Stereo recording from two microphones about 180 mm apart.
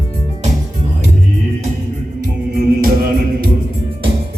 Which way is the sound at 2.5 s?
55° right (ahead or behind).